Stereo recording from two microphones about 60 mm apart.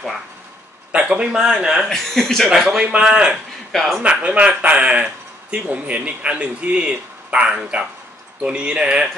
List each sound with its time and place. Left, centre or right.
0.9 s a man's voice: centre
1.8 s a man's voice: centre
3.7 s speech: centre
4.0 s a man's voice: right